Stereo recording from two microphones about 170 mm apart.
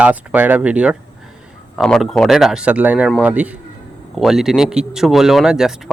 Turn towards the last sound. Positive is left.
turn(degrees=-5)  # may be behind; listen again after turning